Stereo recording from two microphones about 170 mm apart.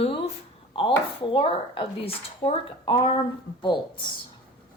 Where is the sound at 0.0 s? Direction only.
35° left (ahead or behind).